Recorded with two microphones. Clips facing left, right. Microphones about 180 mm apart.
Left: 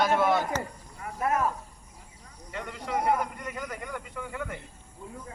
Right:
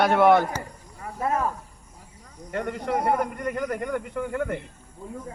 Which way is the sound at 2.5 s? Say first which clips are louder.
Right 6 dB; 55° right (ahead or behind).